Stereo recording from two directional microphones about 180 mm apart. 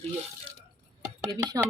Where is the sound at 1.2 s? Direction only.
20° right (ahead or behind).